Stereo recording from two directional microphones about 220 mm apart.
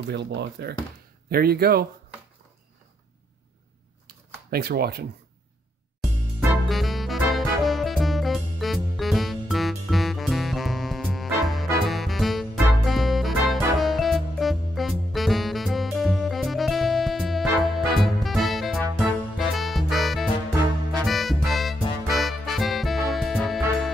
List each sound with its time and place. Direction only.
0.1 s speech: 50° right (ahead or behind)
4.5 s speech: 45° right (ahead or behind)
6.7 s music: centre (ahead or behind)